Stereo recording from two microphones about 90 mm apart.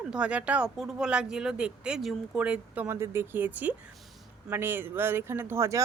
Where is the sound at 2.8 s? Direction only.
30° right (ahead or behind).